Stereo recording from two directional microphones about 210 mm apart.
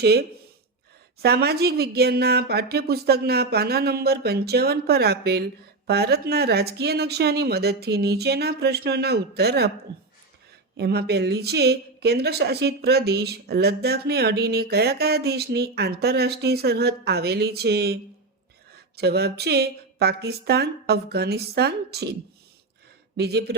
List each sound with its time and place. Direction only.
0.0 s a woman's voice: 50° right (ahead or behind)
10.8 s a woman's voice: 50° right (ahead or behind)
23.1 s a woman's voice: 50° right (ahead or behind)